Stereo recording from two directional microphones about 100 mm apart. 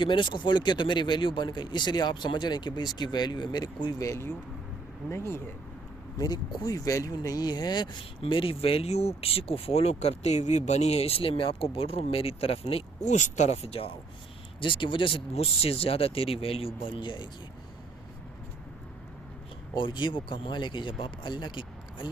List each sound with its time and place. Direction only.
0.0 s speech: 55° left (ahead or behind)
4.0 s speech: 30° left (ahead or behind)
6.1 s speech: 45° left (ahead or behind)
8.2 s speech: 60° left (ahead or behind)
14.6 s speech: 55° left (ahead or behind)
19.7 s speech: 50° left (ahead or behind)